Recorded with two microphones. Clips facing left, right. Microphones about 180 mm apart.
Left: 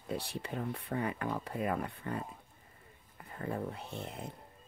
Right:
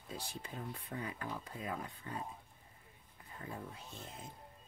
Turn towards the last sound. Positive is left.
turn(degrees=60)  # may be behind; listen again after turning